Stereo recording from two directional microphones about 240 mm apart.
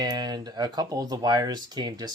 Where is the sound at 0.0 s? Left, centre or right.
Centre.